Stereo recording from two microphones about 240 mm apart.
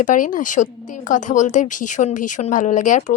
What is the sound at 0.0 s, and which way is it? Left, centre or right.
Speech, left.